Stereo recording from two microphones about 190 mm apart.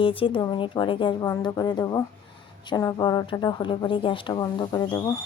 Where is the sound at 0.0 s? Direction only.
25° left (ahead or behind).